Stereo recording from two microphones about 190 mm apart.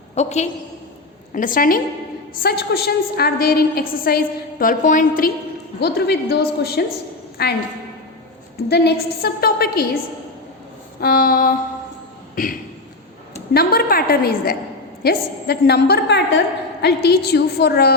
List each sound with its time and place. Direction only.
0.1 s a woman's voice: 35° left (ahead or behind)
5.8 s a woman's voice: 55° left (ahead or behind)
8.7 s a woman's voice: 60° left (ahead or behind)
11.0 s a woman's voice: 50° left (ahead or behind)